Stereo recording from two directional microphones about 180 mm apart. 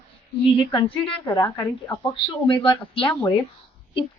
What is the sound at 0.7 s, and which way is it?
A woman's voice, 30° left (ahead or behind).